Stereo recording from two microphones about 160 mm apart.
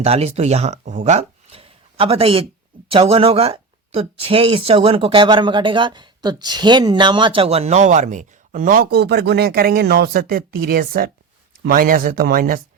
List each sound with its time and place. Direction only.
0.0 s speech: 40° right (ahead or behind); by 12.6 s 65° right (ahead or behind)